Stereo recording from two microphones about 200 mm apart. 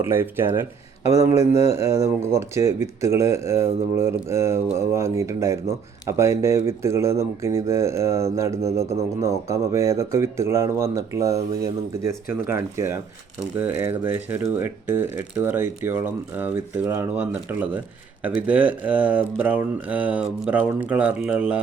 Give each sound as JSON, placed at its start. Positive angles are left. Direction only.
{"t": 0.0, "sound": "speech", "side_deg": -10}
{"t": 1.0, "sound": "speech", "side_deg": 30}
{"t": 1.7, "sound": "speech", "side_deg": -15}